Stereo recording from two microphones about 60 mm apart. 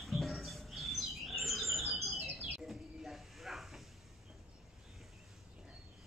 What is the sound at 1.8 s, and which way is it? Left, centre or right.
Bird, right.